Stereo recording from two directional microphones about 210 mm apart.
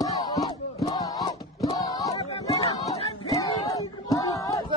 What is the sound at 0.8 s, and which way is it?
Music, 20° left (ahead or behind).